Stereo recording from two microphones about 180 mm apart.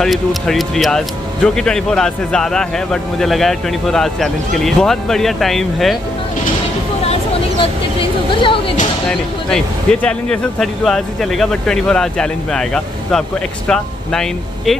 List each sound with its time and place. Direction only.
0.0 s speech: centre (ahead or behind)
8.4 s speech: 30° left (ahead or behind)
10.0 s speech: 5° left (ahead or behind)